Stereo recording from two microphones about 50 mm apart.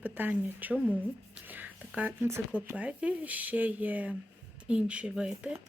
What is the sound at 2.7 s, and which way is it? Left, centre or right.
Speech, right.